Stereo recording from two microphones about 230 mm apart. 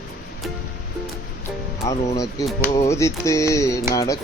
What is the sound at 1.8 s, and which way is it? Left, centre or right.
Speech, centre.